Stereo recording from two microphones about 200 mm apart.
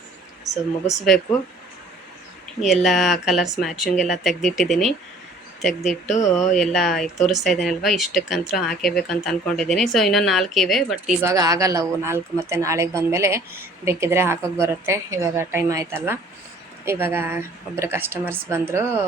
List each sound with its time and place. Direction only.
1.0 s speech: centre (ahead or behind)
2.6 s speech: centre (ahead or behind)
6.1 s a sound: 35° left (ahead or behind)
6.6 s speech: centre (ahead or behind)
11.3 s a woman's voice: 15° right (ahead or behind)